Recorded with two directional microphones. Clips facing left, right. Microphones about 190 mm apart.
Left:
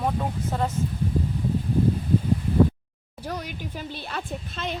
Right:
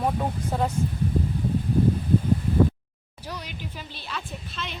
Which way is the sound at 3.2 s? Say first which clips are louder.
Left 4 dB; 50° left (ahead or behind).